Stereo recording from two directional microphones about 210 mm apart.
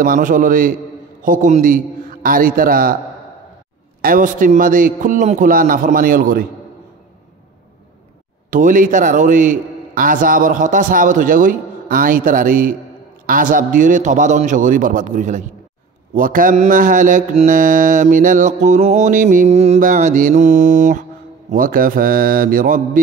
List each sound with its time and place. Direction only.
0.0 s mantra: 40° right (ahead or behind)
4.0 s mantra: 40° right (ahead or behind)
8.5 s mantra: 40° right (ahead or behind)
21.5 s a man's voice: 40° right (ahead or behind)